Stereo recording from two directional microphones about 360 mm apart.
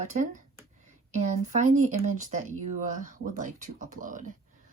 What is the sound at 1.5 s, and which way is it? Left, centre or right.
A woman's voice, centre.